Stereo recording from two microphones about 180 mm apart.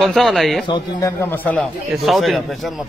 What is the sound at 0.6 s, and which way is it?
Speech, 25° left (ahead or behind).